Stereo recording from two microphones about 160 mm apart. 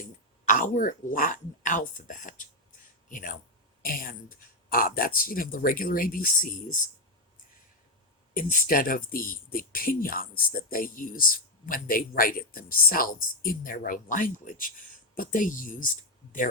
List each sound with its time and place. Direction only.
0.0 s speech: 55° left (ahead or behind)
8.3 s speech: 55° left (ahead or behind)